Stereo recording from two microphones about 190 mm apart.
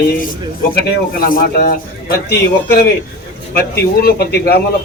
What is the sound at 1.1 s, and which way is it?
A man's voice, 50° left (ahead or behind).